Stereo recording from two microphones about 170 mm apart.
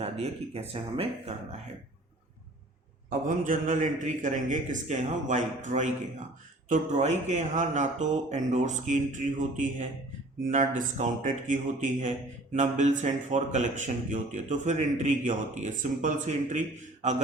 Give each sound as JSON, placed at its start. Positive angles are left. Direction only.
{"t": 0.0, "sound": "speech", "side_deg": -35}
{"t": 3.1, "sound": "speech", "side_deg": -50}